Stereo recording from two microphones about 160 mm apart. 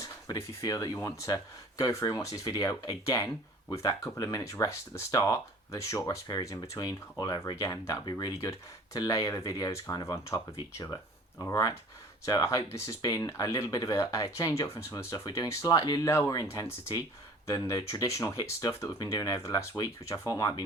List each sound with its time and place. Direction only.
0.0 s speech: 20° left (ahead or behind)